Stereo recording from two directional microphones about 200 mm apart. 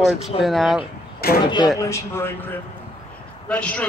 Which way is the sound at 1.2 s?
50° left (ahead or behind).